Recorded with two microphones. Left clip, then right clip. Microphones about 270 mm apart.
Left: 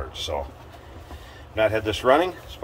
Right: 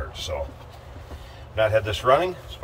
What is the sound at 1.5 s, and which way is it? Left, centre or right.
Speech, centre.